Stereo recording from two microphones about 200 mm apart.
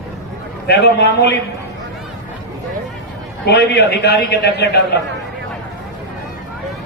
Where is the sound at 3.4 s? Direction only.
55° left (ahead or behind).